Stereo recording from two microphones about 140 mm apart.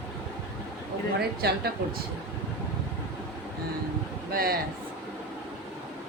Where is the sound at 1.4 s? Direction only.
90° right.